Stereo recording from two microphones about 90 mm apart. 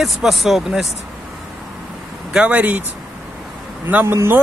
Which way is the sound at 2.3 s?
15° right (ahead or behind).